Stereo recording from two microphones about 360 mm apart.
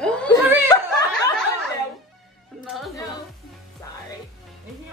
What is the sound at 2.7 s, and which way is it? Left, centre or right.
Music, centre.